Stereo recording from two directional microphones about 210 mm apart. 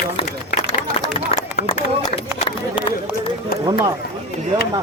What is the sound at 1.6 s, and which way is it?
Speech, 30° left (ahead or behind).